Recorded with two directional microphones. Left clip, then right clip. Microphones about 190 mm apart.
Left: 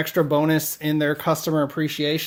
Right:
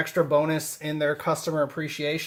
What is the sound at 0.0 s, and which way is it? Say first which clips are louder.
Speech: left 2 dB; 45° left (ahead or behind).